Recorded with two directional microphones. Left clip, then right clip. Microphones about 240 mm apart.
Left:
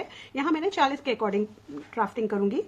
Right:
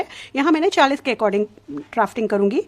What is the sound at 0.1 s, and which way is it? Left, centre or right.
A woman's voice, right.